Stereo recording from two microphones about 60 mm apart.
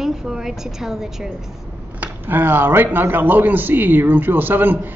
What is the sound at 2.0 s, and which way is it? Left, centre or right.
A man's voice, right.